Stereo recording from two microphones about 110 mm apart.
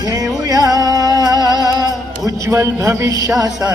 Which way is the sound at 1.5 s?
35° right (ahead or behind).